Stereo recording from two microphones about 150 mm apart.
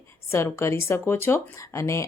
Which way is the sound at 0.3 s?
20° left (ahead or behind).